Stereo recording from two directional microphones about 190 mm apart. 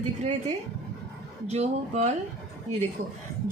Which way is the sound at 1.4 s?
35° right (ahead or behind).